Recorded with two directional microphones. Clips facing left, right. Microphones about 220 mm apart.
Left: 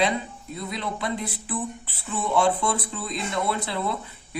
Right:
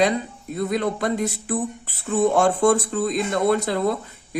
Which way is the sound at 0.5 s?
50° right (ahead or behind).